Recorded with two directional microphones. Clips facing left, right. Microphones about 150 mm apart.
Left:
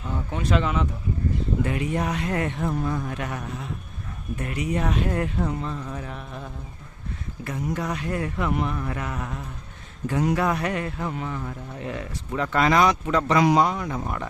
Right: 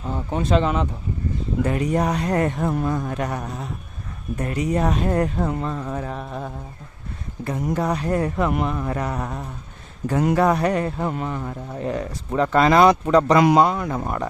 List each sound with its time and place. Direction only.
0.0 s speech: 35° right (ahead or behind)
5.5 s music: 50° right (ahead or behind)
7.5 s speech: 40° right (ahead or behind)
10.1 s music: 55° right (ahead or behind)
10.3 s speech: 35° right (ahead or behind)
13.4 s speech: 60° right (ahead or behind)